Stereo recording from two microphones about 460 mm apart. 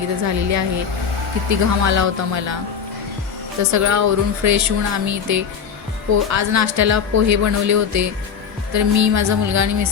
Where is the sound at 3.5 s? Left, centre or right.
Right.